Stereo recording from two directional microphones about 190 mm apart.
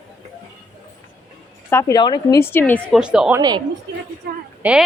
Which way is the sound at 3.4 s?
20° right (ahead or behind).